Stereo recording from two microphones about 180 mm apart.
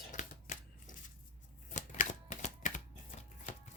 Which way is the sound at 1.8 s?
45° left (ahead or behind).